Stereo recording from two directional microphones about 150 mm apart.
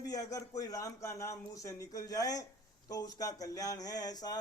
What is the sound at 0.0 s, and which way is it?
A man's voice, 25° left (ahead or behind).